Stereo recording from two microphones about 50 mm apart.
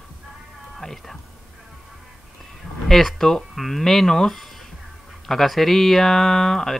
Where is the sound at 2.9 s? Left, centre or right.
Centre.